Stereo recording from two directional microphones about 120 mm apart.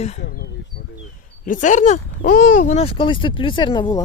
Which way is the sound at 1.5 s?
90° left.